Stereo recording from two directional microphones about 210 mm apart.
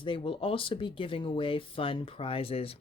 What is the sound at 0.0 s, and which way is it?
Speech, 25° left (ahead or behind).